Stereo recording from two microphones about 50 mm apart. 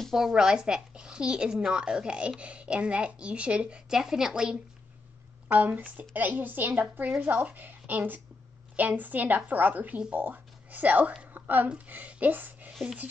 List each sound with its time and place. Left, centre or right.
0.1 s a woman's voice: centre
3.9 s a woman's voice: centre
5.5 s speech: right
11.3 s a sound: right
11.8 s speech: right
12.8 s speech: right